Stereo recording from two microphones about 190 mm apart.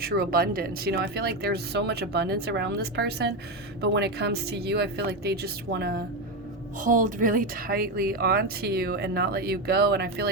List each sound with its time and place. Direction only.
0.0 s speech: 50° right (ahead or behind)
6.7 s speech: 45° right (ahead or behind)